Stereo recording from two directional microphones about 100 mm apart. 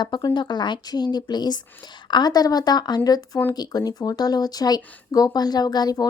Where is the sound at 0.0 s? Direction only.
45° left (ahead or behind).